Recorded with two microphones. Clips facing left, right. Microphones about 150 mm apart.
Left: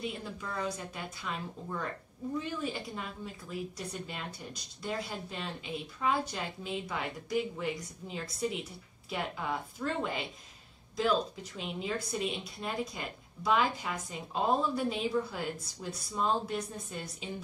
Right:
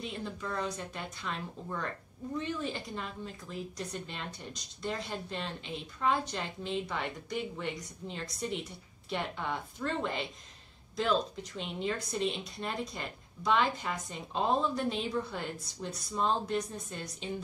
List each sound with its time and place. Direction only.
0.0 s speech: 5° left (ahead or behind)